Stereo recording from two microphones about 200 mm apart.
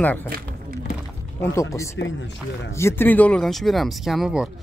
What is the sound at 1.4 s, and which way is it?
Speech, 15° left (ahead or behind).